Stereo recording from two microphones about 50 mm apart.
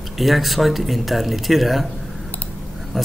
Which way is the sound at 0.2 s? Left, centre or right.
Centre.